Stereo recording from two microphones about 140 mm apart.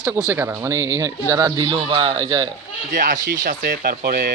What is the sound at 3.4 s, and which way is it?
Speech, 90° right.